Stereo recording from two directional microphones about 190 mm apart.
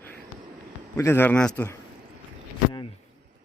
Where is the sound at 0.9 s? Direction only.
15° left (ahead or behind).